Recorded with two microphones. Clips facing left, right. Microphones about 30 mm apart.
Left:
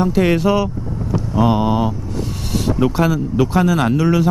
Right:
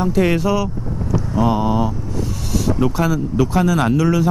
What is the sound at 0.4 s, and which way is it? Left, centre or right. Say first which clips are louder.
Speech: left 2 dB; left.